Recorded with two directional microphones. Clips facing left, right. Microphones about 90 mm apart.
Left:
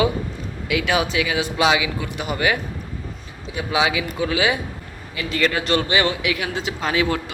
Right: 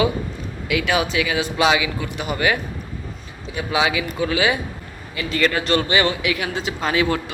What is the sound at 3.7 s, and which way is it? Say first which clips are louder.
Speech: even; 15° left (ahead or behind).